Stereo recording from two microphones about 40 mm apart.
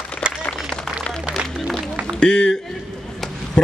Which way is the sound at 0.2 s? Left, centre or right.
Right.